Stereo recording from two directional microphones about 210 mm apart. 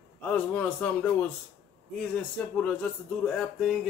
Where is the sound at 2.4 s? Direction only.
5° left (ahead or behind).